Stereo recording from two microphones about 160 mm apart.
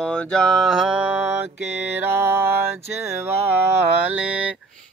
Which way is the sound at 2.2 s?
15° right (ahead or behind).